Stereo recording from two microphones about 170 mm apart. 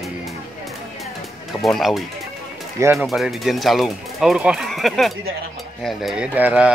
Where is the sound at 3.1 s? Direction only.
Centre (ahead or behind).